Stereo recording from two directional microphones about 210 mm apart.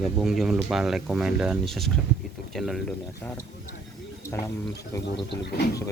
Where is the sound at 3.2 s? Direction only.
15° left (ahead or behind).